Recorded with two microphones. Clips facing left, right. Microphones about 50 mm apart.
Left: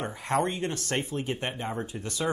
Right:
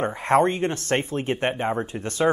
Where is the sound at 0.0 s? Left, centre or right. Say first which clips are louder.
Right 8 dB; right.